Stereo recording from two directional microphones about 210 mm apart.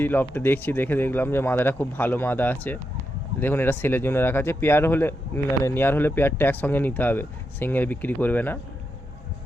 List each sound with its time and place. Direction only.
0.0 s speech: 10° left (ahead or behind)